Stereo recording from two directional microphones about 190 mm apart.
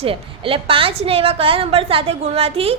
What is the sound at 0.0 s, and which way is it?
A woman's voice, 30° right (ahead or behind).